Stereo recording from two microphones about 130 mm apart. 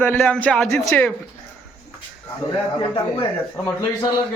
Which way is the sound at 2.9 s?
30° left (ahead or behind).